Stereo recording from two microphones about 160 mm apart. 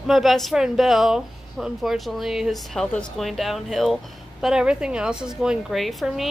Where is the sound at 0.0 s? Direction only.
Centre (ahead or behind).